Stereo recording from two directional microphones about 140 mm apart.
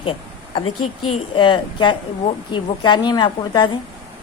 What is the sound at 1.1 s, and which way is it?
A woman's voice, 35° left (ahead or behind).